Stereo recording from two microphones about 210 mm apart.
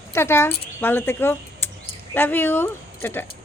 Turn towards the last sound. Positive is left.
turn(degrees=10)  # may be behind; listen again after turning